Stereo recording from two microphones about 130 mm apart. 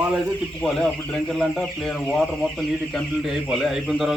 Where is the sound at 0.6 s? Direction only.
5° left (ahead or behind).